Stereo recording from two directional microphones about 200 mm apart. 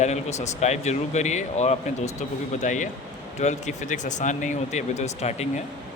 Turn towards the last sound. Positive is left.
turn(degrees=35)  # may be behind; listen again after turning